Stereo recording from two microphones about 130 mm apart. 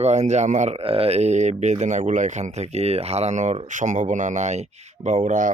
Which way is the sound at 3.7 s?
75° right (ahead or behind).